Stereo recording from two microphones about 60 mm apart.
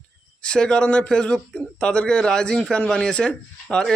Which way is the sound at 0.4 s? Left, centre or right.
Centre.